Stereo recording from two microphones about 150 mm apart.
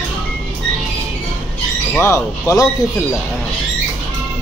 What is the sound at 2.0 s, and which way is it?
Speech, 20° left (ahead or behind).